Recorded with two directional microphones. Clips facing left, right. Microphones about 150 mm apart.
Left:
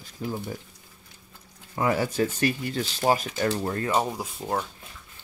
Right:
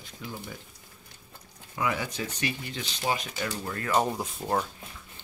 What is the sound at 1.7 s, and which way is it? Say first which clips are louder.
Speech: left 6 dB; 40° left (ahead or behind).